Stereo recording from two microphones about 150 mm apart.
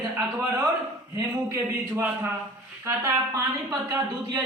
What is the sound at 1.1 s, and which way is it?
A man's voice, 15° right (ahead or behind).